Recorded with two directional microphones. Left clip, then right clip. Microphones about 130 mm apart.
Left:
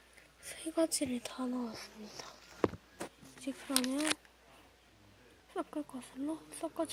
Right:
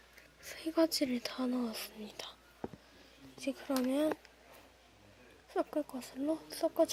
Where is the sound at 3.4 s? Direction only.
20° right (ahead or behind).